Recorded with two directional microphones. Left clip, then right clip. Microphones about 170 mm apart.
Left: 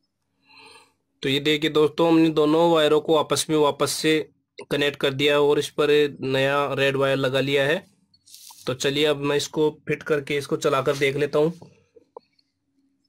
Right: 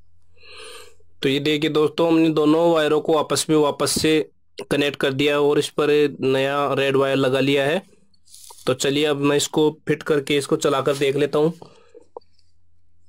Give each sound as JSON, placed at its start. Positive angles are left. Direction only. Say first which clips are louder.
{"t": 0.4, "sound": "speech", "louder": "right 9 dB", "side_deg": -20}